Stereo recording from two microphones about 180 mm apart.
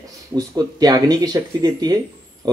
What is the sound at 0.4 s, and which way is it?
Speech, 20° right (ahead or behind).